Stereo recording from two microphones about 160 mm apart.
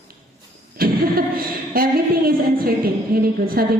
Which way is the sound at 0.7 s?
65° right (ahead or behind).